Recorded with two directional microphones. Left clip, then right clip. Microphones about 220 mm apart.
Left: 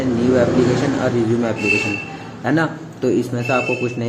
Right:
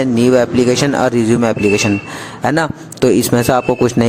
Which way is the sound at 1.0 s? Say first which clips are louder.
Right 5 dB; 55° right (ahead or behind).